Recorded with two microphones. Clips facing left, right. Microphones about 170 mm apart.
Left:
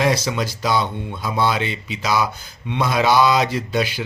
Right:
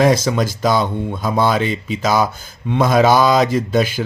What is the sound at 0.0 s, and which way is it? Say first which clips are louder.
Speech: right 5 dB; 45° right (ahead or behind).